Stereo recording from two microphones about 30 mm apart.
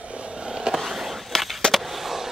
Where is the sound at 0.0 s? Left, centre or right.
Right.